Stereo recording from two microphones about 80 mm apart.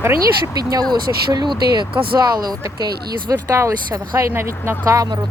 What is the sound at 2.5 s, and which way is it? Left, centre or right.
Speech, right.